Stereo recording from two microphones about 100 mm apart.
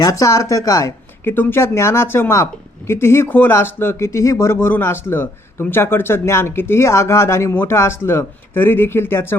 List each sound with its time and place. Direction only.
0.0 s speech: 35° left (ahead or behind)
1.2 s speech: 20° left (ahead or behind)